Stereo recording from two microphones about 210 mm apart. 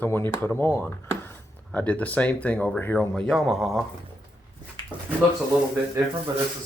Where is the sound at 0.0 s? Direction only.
10° left (ahead or behind).